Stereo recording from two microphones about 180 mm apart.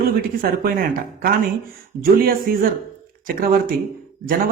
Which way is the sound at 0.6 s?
55° right (ahead or behind).